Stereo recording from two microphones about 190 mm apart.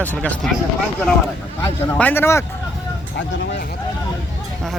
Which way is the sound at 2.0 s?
10° left (ahead or behind).